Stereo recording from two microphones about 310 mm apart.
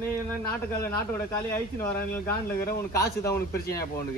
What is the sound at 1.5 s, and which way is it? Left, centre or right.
Speech, centre.